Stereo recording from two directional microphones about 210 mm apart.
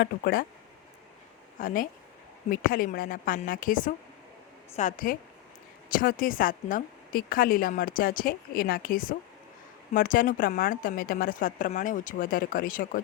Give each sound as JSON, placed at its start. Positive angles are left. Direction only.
{"t": 0.0, "sound": "speech", "side_deg": 45}
{"t": 1.5, "sound": "a woman's voice", "side_deg": 40}